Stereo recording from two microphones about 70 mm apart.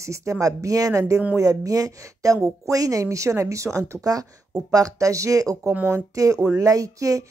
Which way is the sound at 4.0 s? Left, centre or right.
Right.